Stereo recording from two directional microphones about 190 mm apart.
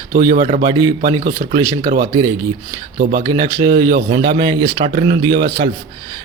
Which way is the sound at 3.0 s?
50° right (ahead or behind).